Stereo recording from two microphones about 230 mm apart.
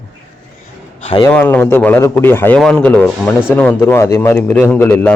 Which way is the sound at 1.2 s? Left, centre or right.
Centre.